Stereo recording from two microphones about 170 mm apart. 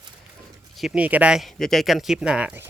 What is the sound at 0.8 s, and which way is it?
Speech, 5° right (ahead or behind).